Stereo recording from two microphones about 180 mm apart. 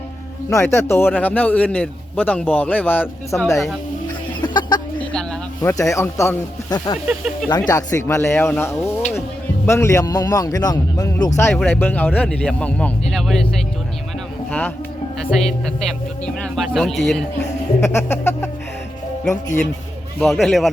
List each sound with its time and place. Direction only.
0.5 s a man's voice: 15° left (ahead or behind)
4.4 s chicken: 25° left (ahead or behind)
4.9 s snake: 5° left (ahead or behind)
5.7 s a man's voice: 15° left (ahead or behind)
11.3 s a man's voice: 10° left (ahead or behind)
15.3 s speech: centre (ahead or behind)
17.7 s a man's voice: 15° left (ahead or behind)
20.1 s speech: centre (ahead or behind)